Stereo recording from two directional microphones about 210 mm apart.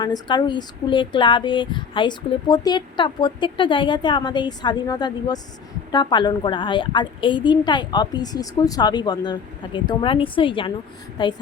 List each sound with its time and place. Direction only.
0.0 s speech: 20° left (ahead or behind)